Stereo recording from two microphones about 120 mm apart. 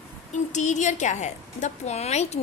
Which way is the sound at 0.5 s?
85° left.